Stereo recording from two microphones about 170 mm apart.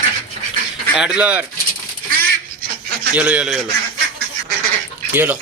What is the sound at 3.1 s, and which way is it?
Speech, 10° right (ahead or behind).